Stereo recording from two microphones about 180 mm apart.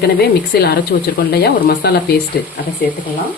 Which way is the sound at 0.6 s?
60° left (ahead or behind).